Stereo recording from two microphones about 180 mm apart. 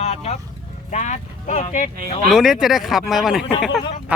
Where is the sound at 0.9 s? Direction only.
40° left (ahead or behind).